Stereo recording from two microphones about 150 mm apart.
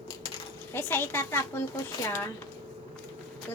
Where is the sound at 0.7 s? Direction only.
15° left (ahead or behind).